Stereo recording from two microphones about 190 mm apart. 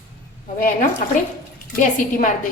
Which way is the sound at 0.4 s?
45° left (ahead or behind).